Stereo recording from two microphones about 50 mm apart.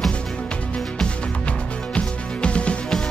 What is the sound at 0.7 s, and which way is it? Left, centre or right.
Music, centre.